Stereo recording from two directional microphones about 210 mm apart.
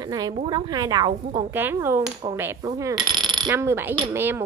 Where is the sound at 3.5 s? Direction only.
10° right (ahead or behind).